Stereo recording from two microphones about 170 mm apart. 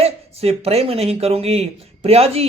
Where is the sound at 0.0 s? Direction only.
35° right (ahead or behind).